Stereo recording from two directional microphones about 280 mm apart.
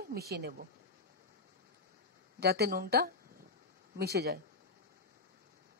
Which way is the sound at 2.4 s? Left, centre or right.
Right.